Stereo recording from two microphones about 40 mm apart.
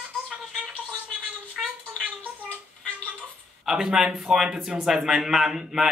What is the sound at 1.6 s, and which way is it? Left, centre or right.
Gargling, centre.